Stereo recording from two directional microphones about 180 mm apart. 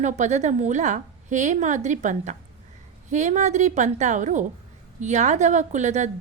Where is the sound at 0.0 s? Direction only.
40° right (ahead or behind).